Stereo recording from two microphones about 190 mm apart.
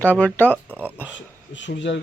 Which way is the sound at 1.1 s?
70° left (ahead or behind).